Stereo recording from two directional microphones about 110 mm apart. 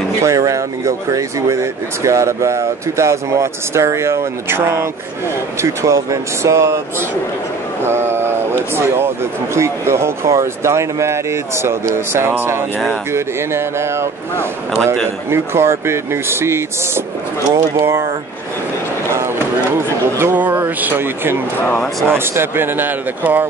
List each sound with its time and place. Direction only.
0.2 s speech: 30° right (ahead or behind)
7.8 s a sound: 20° right (ahead or behind)
8.7 s speech: 20° right (ahead or behind)
15.2 s speech: 25° right (ahead or behind)
19.1 s speech: 25° right (ahead or behind)